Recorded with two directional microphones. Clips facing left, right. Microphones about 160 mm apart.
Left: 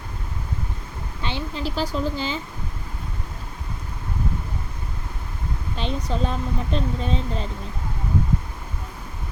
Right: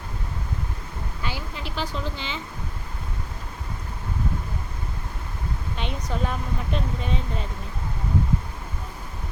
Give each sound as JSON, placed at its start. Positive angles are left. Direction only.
{"t": 1.2, "sound": "speech", "side_deg": 25}
{"t": 5.7, "sound": "speech", "side_deg": 30}